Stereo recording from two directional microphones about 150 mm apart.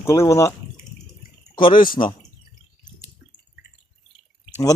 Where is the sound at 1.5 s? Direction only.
35° left (ahead or behind).